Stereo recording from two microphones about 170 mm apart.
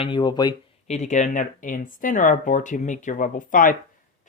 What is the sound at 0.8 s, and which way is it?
Speech, 45° left (ahead or behind).